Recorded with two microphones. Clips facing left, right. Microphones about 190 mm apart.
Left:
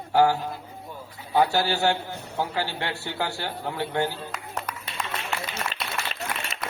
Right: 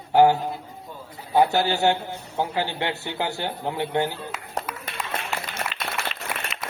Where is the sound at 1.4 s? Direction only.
20° right (ahead or behind).